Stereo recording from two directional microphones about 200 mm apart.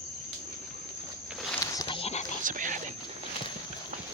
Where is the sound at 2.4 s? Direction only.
40° right (ahead or behind).